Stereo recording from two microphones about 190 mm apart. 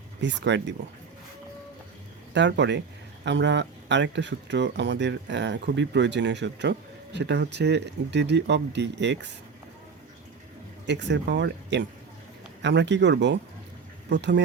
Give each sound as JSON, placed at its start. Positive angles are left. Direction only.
{"t": 0.2, "sound": "speech", "side_deg": -70}
{"t": 2.3, "sound": "speech", "side_deg": -70}
{"t": 10.8, "sound": "speech", "side_deg": -65}